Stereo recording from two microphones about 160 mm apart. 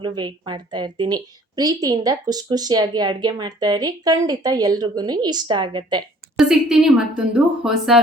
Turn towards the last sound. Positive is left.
turn(degrees=-5)  # may be behind; listen again after turning